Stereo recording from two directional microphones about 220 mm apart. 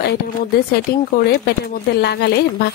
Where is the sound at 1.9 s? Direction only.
45° left (ahead or behind).